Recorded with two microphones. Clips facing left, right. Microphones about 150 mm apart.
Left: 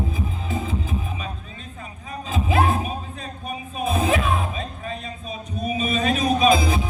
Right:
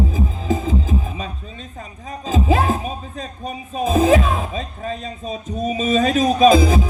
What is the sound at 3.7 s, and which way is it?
Music, 35° right (ahead or behind).